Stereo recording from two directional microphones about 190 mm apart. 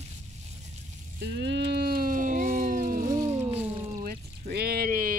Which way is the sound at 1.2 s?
65° right (ahead or behind).